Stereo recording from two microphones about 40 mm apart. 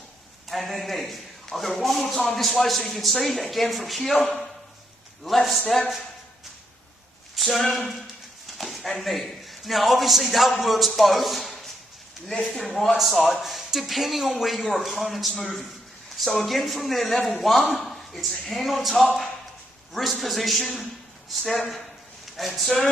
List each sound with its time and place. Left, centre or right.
0.5 s speech: centre
7.3 s a man's voice: centre